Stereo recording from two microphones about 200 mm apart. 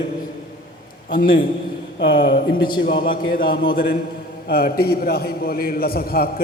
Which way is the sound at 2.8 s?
45° left (ahead or behind).